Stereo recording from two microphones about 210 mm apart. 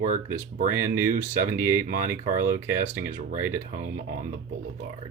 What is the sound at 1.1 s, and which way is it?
Speech, 40° right (ahead or behind).